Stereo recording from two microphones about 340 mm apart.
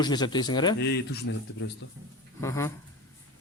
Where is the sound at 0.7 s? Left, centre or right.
Left.